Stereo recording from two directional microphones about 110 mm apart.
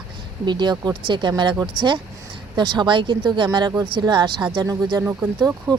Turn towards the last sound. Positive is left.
turn(degrees=-20)  # may be behind; listen again after turning